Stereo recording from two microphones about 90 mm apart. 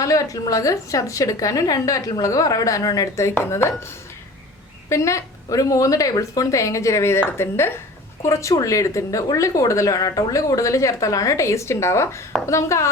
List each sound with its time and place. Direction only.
0.0 s a woman's voice: 40° left (ahead or behind)